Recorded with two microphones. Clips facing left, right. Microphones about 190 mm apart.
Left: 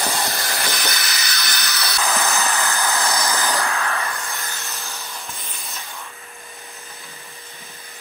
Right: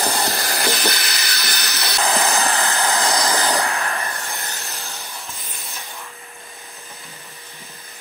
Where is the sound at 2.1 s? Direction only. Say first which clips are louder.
Right 3 dB; 30° right (ahead or behind).